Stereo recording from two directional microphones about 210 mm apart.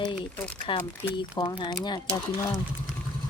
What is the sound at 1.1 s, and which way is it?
Speech, 20° left (ahead or behind).